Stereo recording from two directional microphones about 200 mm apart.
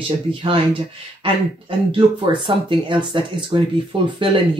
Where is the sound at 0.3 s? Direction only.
25° right (ahead or behind).